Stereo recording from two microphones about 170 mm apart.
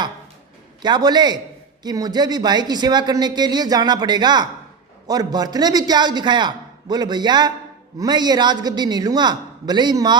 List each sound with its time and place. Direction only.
0.8 s speech: 25° right (ahead or behind)